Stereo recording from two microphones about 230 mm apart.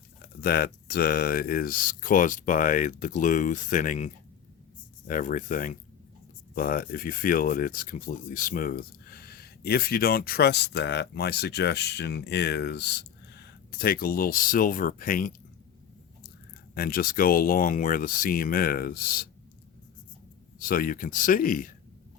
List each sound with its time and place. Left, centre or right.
0.4 s speech: left
16.7 s speech: left
20.6 s speech: left